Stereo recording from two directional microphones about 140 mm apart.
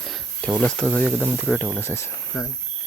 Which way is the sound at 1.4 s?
5° left (ahead or behind).